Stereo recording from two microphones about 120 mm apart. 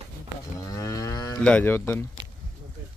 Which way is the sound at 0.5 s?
30° left (ahead or behind).